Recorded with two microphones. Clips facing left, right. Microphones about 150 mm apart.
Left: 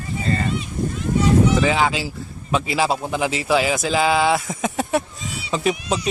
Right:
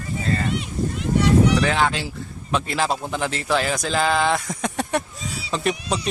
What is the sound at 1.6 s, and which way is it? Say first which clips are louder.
Speech: left 2 dB; 5° left (ahead or behind).